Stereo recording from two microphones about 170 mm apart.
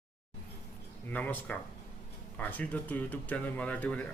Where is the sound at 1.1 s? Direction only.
10° left (ahead or behind).